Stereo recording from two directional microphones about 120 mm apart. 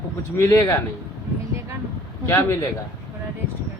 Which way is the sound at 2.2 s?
20° left (ahead or behind).